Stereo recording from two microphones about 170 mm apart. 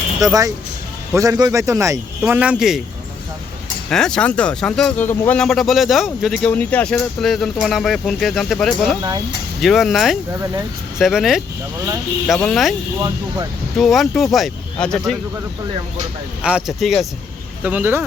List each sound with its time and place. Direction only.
0.2 s a man's voice: 20° right (ahead or behind); by 2.8 s centre (ahead or behind)
3.8 s speech: 5° left (ahead or behind)
9.0 s speech: 25° right (ahead or behind)
9.6 s speech: centre (ahead or behind)
13.7 s speech: centre (ahead or behind)
16.4 s a man's voice: 5° right (ahead or behind)